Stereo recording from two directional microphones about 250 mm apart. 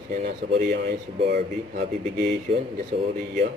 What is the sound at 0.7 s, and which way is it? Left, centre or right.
Speech, right.